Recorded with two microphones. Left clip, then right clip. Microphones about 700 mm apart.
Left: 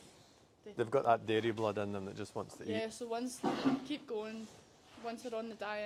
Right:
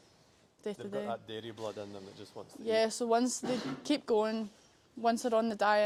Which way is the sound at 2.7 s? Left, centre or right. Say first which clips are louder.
Right 11 dB; right.